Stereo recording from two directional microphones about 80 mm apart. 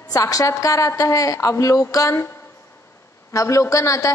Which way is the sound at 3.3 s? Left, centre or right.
Left.